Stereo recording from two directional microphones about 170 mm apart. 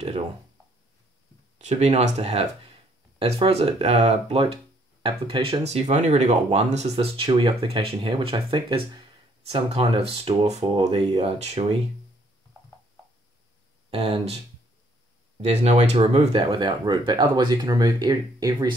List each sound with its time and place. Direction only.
1.6 s speech: 40° right (ahead or behind)
13.8 s speech: 35° right (ahead or behind)
15.4 s speech: 40° right (ahead or behind); by 18.8 s 25° right (ahead or behind)